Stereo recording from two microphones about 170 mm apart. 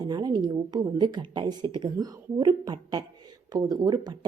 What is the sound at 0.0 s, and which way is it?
A woman's voice, 25° right (ahead or behind).